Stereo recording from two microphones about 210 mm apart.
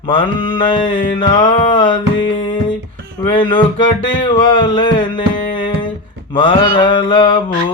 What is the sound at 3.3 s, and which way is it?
Mantra, 25° left (ahead or behind).